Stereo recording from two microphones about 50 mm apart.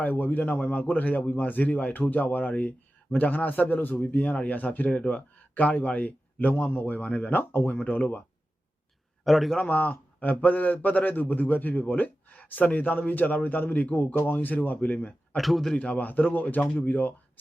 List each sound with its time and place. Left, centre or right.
0.0 s speech: left
7.9 s speech: left
9.2 s a man's voice: centre
9.6 s speech: left
15.4 s a man's voice: centre
15.8 s speech: left